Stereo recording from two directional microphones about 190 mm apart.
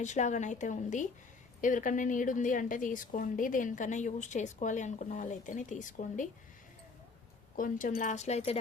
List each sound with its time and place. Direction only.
0.0 s a woman's voice: 40° left (ahead or behind)
7.5 s a woman's voice: 45° left (ahead or behind)